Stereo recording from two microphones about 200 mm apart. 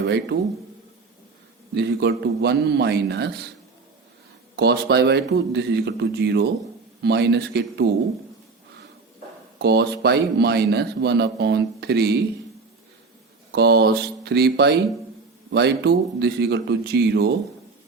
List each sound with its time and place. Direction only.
0.0 s speech: 60° right (ahead or behind)
1.7 s a man's voice: 55° right (ahead or behind)
4.5 s a man's voice: 55° right (ahead or behind)
9.6 s a man's voice: 55° right (ahead or behind)
13.5 s a man's voice: 55° right (ahead or behind)